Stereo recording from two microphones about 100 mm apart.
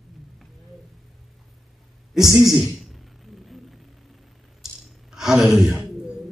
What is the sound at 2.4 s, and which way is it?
Speech, centre (ahead or behind).